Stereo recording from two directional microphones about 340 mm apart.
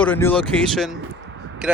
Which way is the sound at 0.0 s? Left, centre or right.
Centre.